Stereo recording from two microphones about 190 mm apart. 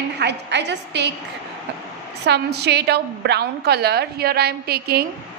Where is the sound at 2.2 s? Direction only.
60° right (ahead or behind).